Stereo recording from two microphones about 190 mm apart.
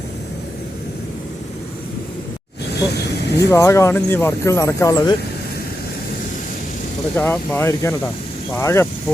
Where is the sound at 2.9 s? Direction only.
60° left (ahead or behind).